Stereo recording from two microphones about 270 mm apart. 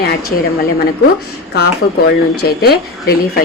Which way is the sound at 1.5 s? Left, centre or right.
Left.